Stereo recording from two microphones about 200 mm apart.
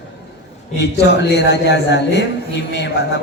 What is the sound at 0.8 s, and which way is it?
A man's voice, 60° left (ahead or behind).